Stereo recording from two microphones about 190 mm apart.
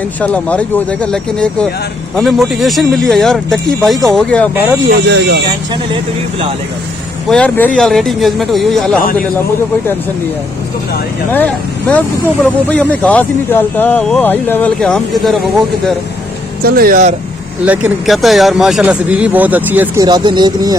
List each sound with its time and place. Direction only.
0.2 s speech: 5° left (ahead or behind)
4.8 s speech: 65° right (ahead or behind)
7.2 s speech: 5° left (ahead or behind)
11.3 s speech: 10° left (ahead or behind)
16.6 s speech: 50° right (ahead or behind)
17.6 s speech: 5° right (ahead or behind)
20.1 s speech: 20° right (ahead or behind)